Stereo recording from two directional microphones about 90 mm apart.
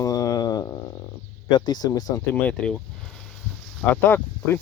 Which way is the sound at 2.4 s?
10° left (ahead or behind).